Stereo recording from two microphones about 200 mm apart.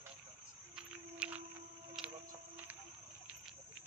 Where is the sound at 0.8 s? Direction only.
5° right (ahead or behind).